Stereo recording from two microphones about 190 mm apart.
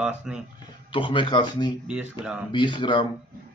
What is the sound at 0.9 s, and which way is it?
Speech, 25° left (ahead or behind).